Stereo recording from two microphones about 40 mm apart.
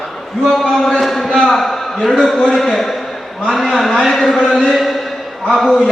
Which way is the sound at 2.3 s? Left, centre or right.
Centre.